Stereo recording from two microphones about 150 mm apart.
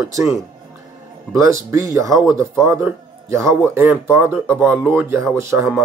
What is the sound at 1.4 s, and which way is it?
A man's voice, 20° right (ahead or behind).